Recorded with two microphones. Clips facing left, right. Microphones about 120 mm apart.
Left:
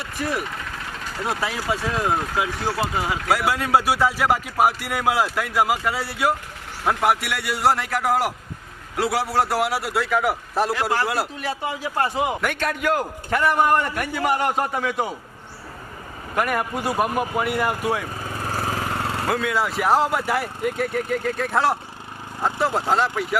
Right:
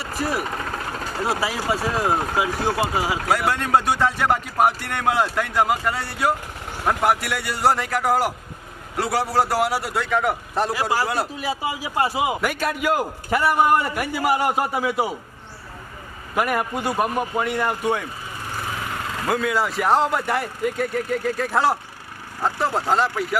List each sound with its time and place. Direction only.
0.3 s vehicle: 40° right (ahead or behind)
1.2 s a man's voice: 5° right (ahead or behind)
16.3 s a man's voice: 5° right (ahead or behind)
18.3 s lawn mower: 45° left (ahead or behind)
19.3 s a man's voice: centre (ahead or behind)